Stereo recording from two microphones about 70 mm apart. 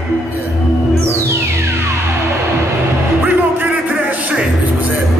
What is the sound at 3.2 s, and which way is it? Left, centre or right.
Music, right.